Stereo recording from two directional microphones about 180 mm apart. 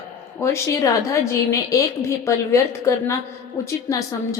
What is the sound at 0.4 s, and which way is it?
A woman's voice, 15° left (ahead or behind).